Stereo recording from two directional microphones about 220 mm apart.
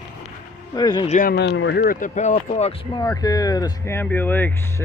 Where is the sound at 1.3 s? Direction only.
50° left (ahead or behind).